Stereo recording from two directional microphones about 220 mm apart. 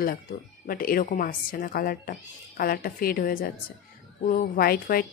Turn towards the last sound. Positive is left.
turn(degrees=45)  # may be behind; listen again after turning